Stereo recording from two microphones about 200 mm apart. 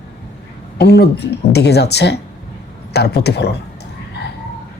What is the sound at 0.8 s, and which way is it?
Speech, 55° left (ahead or behind).